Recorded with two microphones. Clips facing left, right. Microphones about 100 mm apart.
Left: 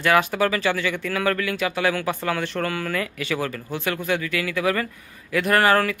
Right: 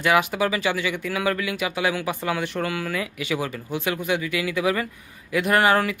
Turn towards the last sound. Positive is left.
turn(degrees=-15)  # may be behind; listen again after turning